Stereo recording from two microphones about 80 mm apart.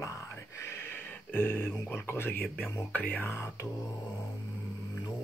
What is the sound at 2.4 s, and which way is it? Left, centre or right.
Speech, centre.